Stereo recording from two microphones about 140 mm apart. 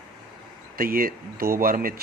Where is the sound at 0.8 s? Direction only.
90° right.